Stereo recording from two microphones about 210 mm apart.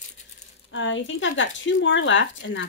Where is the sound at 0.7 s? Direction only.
65° left (ahead or behind).